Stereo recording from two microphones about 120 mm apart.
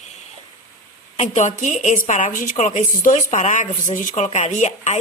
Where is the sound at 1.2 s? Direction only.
85° left.